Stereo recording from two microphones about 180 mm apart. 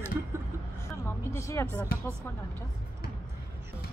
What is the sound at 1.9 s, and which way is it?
Speech, 55° left (ahead or behind).